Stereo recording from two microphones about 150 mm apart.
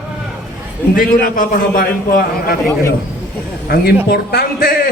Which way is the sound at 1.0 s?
70° left (ahead or behind).